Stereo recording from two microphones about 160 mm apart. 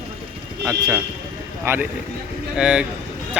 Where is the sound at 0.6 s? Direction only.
20° right (ahead or behind).